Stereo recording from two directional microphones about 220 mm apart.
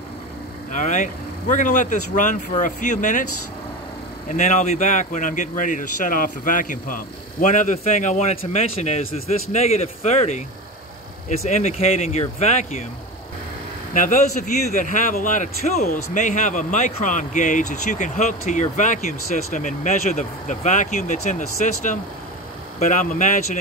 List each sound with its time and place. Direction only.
0.7 s speech: 35° left (ahead or behind)
4.3 s speech: 35° left (ahead or behind)
13.9 s speech: 35° left (ahead or behind)